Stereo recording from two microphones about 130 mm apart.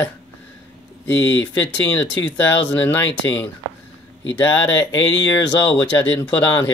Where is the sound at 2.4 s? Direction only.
15° left (ahead or behind).